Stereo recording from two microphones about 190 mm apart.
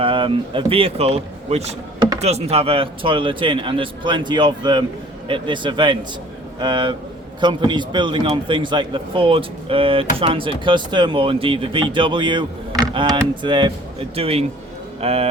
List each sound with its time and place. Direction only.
0.0 s a man's voice: 25° right (ahead or behind)